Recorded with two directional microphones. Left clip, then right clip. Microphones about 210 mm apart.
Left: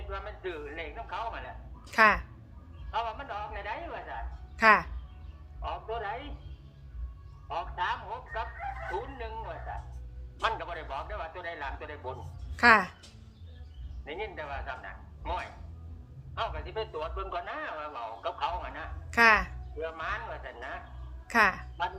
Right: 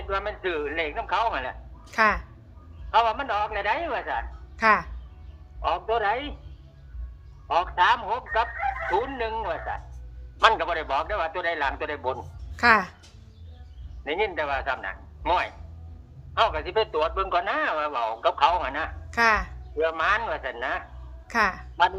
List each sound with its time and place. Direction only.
0.1 s a man's voice: 50° right (ahead or behind)
1.9 s speech: 5° left (ahead or behind)
2.9 s a man's voice: 50° right (ahead or behind)
4.5 s speech: 5° left (ahead or behind)
5.6 s a man's voice: 55° right (ahead or behind)
7.4 s a man's voice: 55° right (ahead or behind)
12.5 s speech: centre (ahead or behind)
14.0 s a man's voice: 55° right (ahead or behind)
19.1 s speech: 5° left (ahead or behind)
19.8 s a man's voice: 55° right (ahead or behind)
21.2 s a woman's voice: centre (ahead or behind)